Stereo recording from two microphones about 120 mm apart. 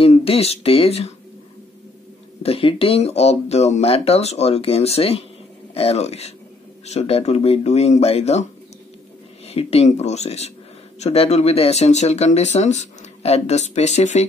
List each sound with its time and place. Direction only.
0.0 s speech: 55° left (ahead or behind)
2.4 s speech: 50° left (ahead or behind)
9.5 s speech: 60° left (ahead or behind)